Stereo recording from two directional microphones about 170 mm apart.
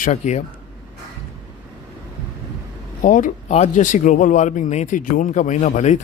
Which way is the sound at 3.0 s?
50° left (ahead or behind).